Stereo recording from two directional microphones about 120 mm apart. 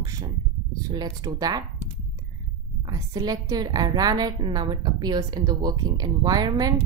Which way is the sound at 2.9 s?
30° right (ahead or behind).